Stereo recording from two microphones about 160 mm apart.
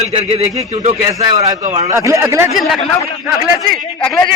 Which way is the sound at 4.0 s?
10° left (ahead or behind).